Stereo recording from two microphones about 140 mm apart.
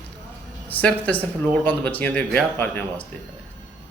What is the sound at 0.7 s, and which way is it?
Speech, 10° left (ahead or behind).